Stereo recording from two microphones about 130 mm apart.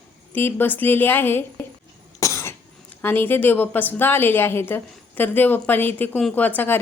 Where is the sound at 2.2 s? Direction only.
20° left (ahead or behind).